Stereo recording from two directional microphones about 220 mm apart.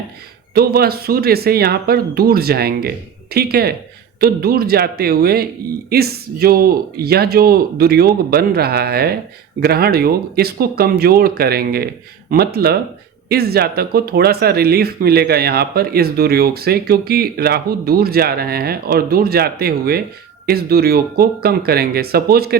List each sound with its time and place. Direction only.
0.5 s speech: 45° right (ahead or behind)